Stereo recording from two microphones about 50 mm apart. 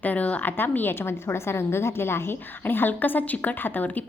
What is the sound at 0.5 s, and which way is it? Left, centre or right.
A woman's voice, left.